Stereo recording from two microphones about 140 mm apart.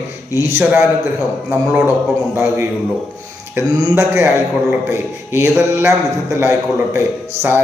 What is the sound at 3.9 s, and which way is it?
A man's voice, 20° right (ahead or behind).